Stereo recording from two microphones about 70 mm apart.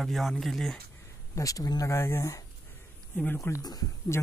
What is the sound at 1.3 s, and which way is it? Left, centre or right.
Speech, left.